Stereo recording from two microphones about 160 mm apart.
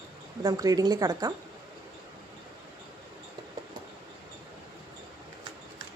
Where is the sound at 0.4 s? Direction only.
25° right (ahead or behind).